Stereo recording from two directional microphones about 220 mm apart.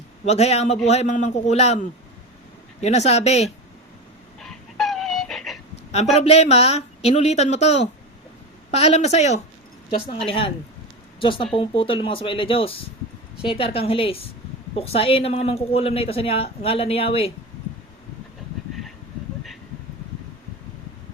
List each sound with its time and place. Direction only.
0.3 s a man's voice: 30° left (ahead or behind)
4.4 s dog: centre (ahead or behind)
6.1 s speech: 30° left (ahead or behind)